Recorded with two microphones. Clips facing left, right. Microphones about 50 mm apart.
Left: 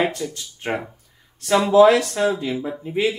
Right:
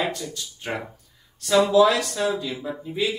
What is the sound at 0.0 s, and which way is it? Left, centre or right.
Speech, left.